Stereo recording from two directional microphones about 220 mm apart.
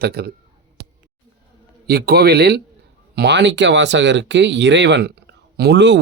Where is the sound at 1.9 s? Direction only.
45° right (ahead or behind).